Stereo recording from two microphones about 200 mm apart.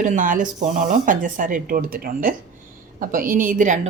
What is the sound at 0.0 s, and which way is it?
A woman's voice, 40° right (ahead or behind).